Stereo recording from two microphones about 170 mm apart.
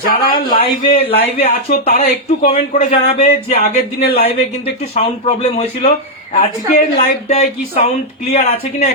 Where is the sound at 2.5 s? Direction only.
35° left (ahead or behind).